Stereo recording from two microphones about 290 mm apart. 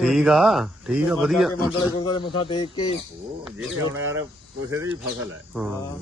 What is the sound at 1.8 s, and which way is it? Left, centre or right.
Speech, centre.